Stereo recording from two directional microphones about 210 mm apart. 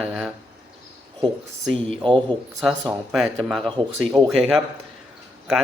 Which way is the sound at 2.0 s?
25° right (ahead or behind).